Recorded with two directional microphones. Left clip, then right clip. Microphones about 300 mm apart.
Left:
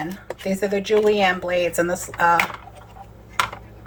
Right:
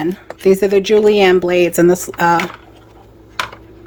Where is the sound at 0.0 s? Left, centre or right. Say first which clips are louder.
Right 12 dB; right.